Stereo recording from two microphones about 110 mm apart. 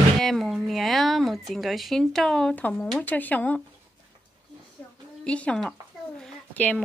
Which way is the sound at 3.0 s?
15° left (ahead or behind).